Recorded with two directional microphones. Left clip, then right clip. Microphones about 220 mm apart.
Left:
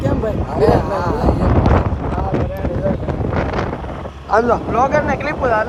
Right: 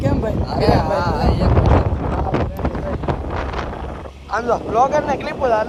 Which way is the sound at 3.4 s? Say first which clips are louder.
Left 5 dB; 5° right (ahead or behind).